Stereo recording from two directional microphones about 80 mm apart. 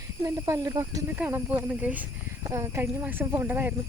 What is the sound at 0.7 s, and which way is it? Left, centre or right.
Speech, right.